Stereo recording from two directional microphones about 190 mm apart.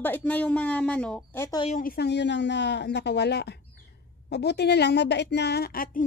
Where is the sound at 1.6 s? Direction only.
40° left (ahead or behind).